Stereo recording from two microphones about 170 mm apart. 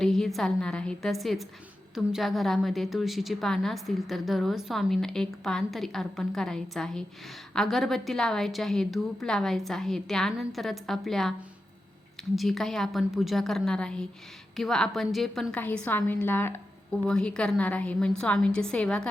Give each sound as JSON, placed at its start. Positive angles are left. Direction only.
{"t": 0.0, "sound": "a woman's voice", "side_deg": 0}
{"t": 12.4, "sound": "a woman's voice", "side_deg": 0}